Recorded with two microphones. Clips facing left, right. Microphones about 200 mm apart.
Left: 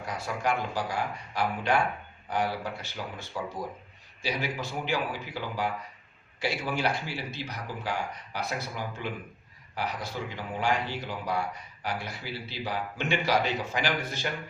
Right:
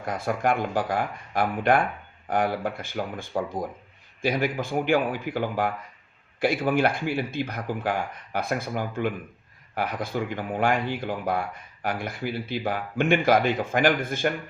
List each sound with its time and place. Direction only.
0.0 s speech: 50° right (ahead or behind)